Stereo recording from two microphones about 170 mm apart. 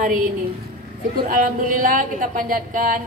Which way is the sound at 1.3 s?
55° right (ahead or behind).